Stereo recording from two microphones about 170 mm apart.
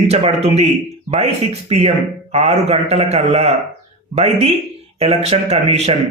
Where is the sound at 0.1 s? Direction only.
35° right (ahead or behind).